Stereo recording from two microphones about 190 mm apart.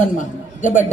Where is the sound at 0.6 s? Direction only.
45° left (ahead or behind).